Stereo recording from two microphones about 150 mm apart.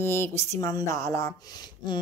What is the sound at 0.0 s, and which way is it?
A woman's voice, 15° left (ahead or behind).